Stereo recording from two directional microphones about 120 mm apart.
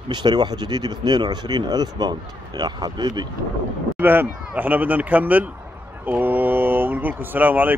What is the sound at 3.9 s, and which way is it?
Speech, 15° right (ahead or behind).